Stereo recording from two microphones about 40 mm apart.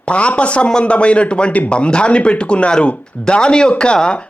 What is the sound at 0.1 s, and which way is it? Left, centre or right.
Speech, left.